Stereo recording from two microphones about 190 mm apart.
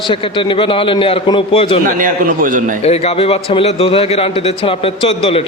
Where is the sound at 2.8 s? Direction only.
35° left (ahead or behind).